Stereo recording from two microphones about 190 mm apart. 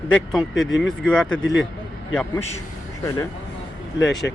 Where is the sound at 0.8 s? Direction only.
5° left (ahead or behind).